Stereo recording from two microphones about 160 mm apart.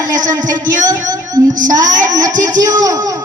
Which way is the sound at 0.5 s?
50° right (ahead or behind).